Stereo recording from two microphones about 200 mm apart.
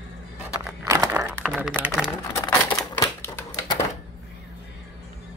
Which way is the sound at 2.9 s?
10° left (ahead or behind).